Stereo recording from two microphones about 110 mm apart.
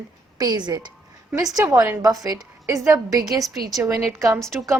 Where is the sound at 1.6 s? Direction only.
25° right (ahead or behind).